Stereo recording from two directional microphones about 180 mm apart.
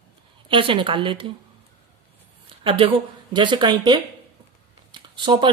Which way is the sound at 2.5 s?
30° right (ahead or behind).